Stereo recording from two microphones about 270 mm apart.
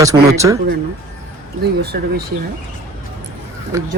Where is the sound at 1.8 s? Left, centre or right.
Right.